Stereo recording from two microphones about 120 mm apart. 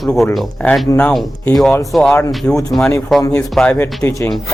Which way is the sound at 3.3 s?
10° left (ahead or behind).